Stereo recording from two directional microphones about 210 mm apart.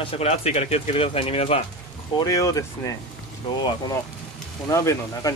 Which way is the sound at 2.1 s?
15° left (ahead or behind).